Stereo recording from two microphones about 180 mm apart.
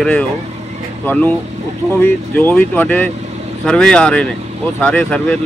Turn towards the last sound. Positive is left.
turn(degrees=5)  # may be behind; listen again after turning